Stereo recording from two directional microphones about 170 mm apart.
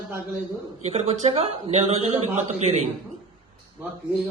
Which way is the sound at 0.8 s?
40° right (ahead or behind).